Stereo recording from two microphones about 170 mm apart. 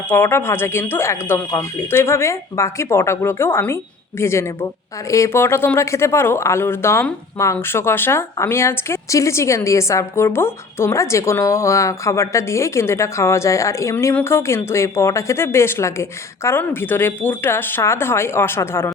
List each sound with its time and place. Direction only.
0.1 s speech: 15° left (ahead or behind)